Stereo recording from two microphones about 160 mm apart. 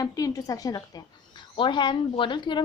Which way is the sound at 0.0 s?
20° left (ahead or behind).